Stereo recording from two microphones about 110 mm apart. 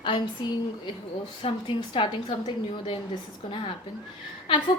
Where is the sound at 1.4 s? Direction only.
55° left (ahead or behind).